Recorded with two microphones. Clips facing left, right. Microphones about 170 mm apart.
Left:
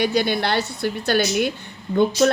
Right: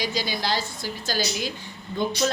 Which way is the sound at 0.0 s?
60° left (ahead or behind).